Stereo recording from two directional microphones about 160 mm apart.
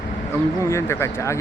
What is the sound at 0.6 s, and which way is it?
Speech, 15° left (ahead or behind).